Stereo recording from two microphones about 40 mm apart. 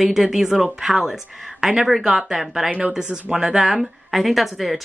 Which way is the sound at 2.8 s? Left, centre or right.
Right.